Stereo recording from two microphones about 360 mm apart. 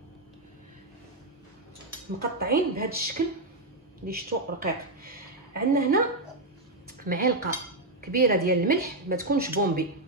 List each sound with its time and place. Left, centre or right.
2.3 s a woman's voice: right